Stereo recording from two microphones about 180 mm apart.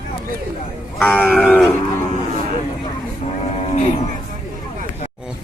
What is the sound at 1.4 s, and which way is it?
Wild animals, 10° left (ahead or behind).